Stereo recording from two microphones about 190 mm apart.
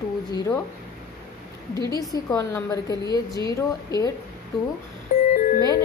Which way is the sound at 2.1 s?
20° left (ahead or behind).